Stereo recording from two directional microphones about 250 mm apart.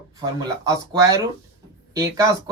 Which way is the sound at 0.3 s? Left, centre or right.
Centre.